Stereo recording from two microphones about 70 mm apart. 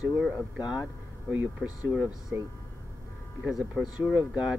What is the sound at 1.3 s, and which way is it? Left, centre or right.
Speech, right.